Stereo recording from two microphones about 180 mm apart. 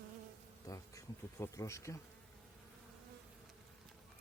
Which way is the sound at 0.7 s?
15° left (ahead or behind).